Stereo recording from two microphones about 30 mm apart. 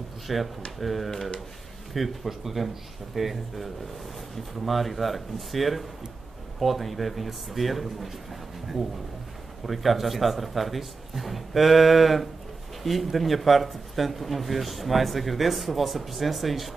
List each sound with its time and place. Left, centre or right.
0.3 s speech: centre
9.7 s speech: centre